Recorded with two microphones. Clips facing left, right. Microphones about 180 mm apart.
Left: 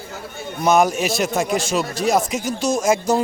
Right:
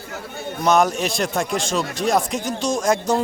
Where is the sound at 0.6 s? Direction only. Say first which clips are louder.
Left 1 dB; 5° left (ahead or behind).